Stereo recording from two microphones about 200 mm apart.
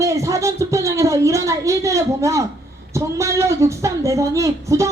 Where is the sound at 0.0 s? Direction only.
15° right (ahead or behind).